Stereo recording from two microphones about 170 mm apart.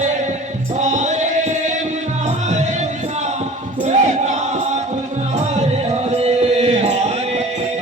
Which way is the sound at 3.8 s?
45° right (ahead or behind).